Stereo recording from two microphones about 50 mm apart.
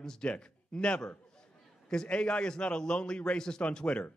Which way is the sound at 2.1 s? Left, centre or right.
Left.